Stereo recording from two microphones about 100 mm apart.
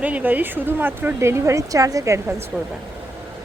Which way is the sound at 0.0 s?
15° right (ahead or behind).